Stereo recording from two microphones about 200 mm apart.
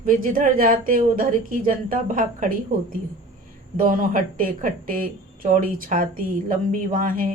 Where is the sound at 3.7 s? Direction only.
45° right (ahead or behind).